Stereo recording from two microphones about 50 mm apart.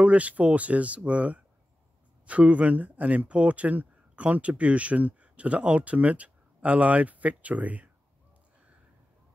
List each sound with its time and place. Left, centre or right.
0.0 s speech: right